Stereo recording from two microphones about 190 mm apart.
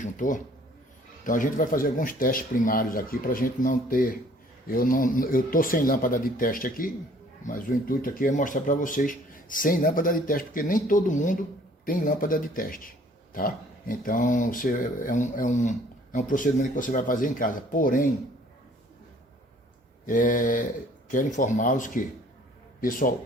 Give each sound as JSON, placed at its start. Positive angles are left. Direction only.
{"t": 0.0, "sound": "speech", "side_deg": 45}
{"t": 20.1, "sound": "speech", "side_deg": 45}